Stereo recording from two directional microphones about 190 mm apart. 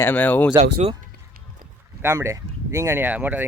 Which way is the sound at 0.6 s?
35° right (ahead or behind).